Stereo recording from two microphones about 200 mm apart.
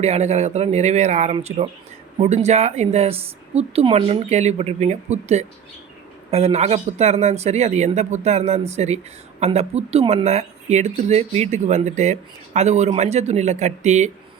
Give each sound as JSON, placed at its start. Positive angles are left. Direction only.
{"t": 0.0, "sound": "speech", "side_deg": -30}